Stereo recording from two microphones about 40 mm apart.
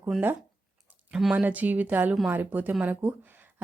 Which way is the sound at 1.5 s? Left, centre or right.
Right.